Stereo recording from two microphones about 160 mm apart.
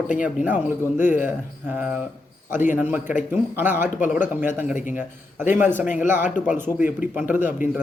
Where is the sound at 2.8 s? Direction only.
10° right (ahead or behind).